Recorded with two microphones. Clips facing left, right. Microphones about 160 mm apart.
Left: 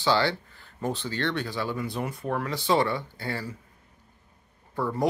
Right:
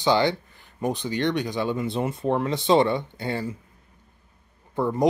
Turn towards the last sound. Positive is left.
turn(degrees=-20)  # may be behind; listen again after turning